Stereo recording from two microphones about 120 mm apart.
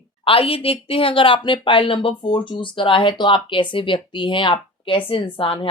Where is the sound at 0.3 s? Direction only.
50° left (ahead or behind).